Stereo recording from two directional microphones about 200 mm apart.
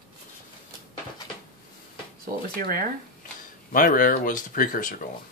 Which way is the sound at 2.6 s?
45° right (ahead or behind).